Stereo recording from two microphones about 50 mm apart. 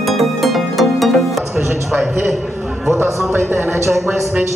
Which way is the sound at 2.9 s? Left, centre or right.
Right.